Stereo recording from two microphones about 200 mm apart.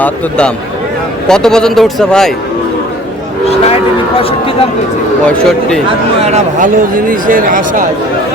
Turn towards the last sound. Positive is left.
turn(degrees=-45)  # may be behind; listen again after turning